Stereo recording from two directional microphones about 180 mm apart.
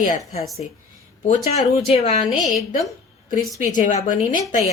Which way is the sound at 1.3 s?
35° left (ahead or behind).